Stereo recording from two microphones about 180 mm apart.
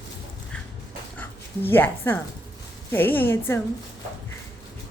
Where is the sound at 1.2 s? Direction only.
10° left (ahead or behind).